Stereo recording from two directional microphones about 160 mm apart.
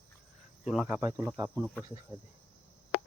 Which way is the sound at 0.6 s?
Centre (ahead or behind).